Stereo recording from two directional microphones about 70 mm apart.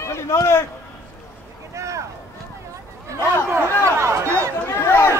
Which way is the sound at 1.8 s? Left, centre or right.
Right.